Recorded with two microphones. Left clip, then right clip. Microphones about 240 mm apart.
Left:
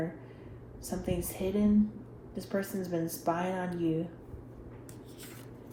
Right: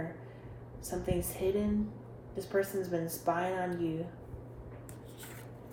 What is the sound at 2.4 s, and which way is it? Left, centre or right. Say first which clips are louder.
Speech: right 3 dB; left.